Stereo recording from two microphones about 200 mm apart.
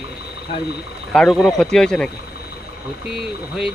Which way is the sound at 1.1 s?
Centre (ahead or behind).